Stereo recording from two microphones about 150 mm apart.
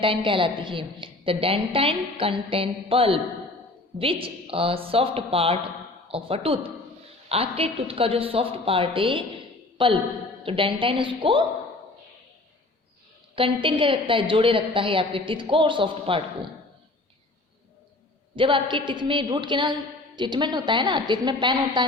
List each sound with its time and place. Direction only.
0.0 s a woman's voice: 35° right (ahead or behind)
13.3 s a woman's voice: 35° right (ahead or behind)
18.3 s a woman's voice: 35° right (ahead or behind)